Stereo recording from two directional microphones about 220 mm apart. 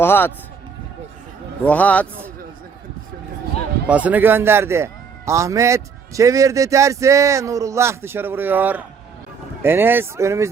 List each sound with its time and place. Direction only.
0.0 s speech: 10° left (ahead or behind)
1.6 s speech: 5° left (ahead or behind)
3.8 s a man's voice: 5° right (ahead or behind)